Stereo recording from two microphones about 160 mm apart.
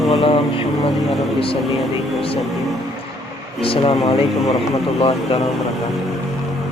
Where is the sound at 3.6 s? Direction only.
35° left (ahead or behind).